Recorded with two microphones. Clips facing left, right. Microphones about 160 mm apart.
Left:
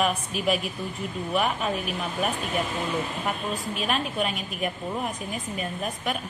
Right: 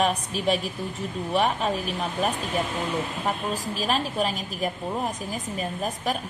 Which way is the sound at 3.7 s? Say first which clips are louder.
Right 2 dB; 35° right (ahead or behind).